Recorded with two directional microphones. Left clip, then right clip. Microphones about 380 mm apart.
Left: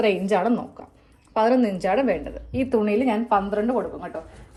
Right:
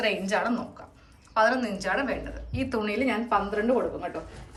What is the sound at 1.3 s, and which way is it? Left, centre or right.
A woman's voice, centre.